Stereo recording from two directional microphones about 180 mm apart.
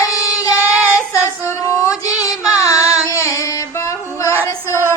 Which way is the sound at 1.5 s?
15° left (ahead or behind).